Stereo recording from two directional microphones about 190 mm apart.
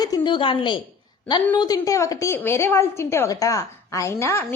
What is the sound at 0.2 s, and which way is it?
A woman's voice, 25° left (ahead or behind).